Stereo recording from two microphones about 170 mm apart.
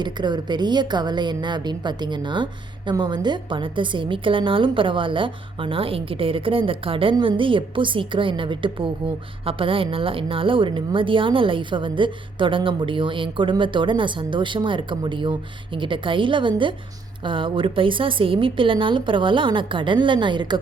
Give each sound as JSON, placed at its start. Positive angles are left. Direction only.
{"t": 0.0, "sound": "a woman's voice", "side_deg": -25}